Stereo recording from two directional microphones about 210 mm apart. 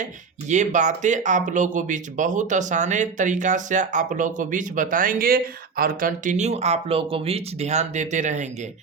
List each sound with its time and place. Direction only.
0.0 s speech: 35° right (ahead or behind)